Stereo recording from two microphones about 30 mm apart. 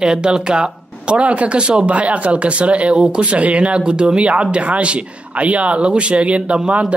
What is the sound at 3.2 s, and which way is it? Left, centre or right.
Speech, right.